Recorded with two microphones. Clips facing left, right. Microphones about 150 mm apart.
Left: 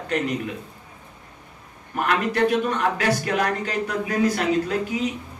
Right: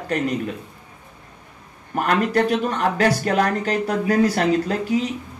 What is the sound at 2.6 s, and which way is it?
A man's voice, 35° right (ahead or behind).